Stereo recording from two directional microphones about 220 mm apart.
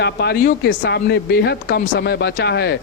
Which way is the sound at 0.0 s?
50° left (ahead or behind).